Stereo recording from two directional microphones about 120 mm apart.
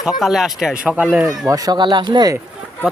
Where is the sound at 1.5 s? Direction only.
30° right (ahead or behind).